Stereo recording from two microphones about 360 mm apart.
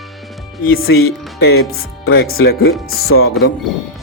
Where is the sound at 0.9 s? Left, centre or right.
Left.